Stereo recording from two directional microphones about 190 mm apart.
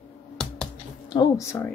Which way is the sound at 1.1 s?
20° left (ahead or behind).